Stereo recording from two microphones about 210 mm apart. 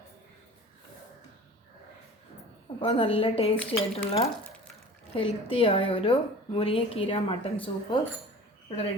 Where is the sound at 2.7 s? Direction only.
25° left (ahead or behind).